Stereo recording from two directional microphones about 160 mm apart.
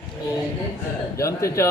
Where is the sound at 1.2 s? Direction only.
20° left (ahead or behind).